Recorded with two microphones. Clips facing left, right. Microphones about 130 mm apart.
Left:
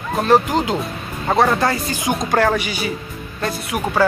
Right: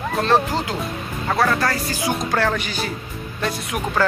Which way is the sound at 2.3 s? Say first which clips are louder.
Left 4 dB; 10° left (ahead or behind).